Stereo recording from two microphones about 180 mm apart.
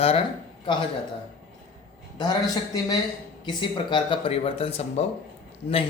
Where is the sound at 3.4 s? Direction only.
25° left (ahead or behind).